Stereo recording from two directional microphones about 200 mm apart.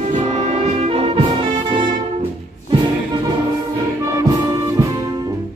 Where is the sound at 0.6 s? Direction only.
30° right (ahead or behind).